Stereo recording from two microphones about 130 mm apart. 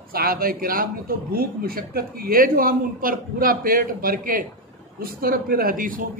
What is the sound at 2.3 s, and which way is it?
A man's voice, 90° right.